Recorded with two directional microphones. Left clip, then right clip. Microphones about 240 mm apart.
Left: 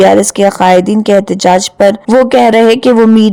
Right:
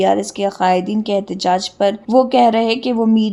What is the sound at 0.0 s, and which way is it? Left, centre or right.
Speech, left.